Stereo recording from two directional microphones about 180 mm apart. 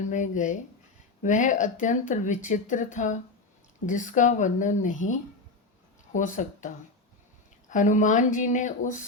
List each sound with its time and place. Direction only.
0.0 s speech: 45° left (ahead or behind)
6.1 s speech: 45° left (ahead or behind)